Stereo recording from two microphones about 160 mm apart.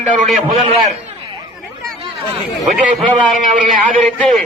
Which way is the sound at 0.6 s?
35° right (ahead or behind).